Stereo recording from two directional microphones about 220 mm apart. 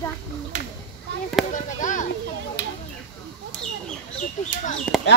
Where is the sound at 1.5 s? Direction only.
35° left (ahead or behind).